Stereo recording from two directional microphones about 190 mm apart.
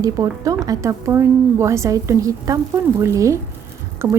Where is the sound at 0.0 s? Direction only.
20° right (ahead or behind).